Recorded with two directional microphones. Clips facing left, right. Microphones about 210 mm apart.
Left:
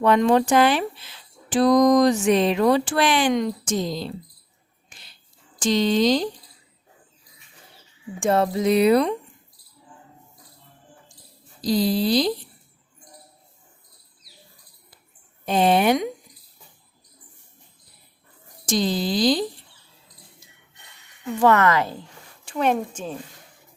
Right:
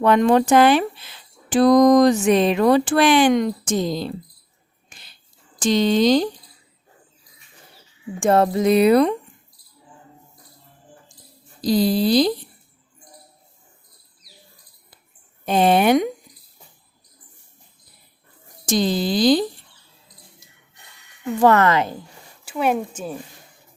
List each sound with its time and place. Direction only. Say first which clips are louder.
0.0 s speech: right 2 dB; 55° right (ahead or behind)
5.6 s speech: right 3 dB; 55° right (ahead or behind)
8.2 s speech: right 3 dB; 50° right (ahead or behind)
11.6 s speech: right 3 dB; 50° right (ahead or behind)
15.4 s speech: right 2 dB; 55° right (ahead or behind)
18.6 s speech: right 3 dB; 55° right (ahead or behind)
21.4 s speech: right 2 dB; 35° right (ahead or behind)
22.4 s speech: right 1 dB; 5° right (ahead or behind)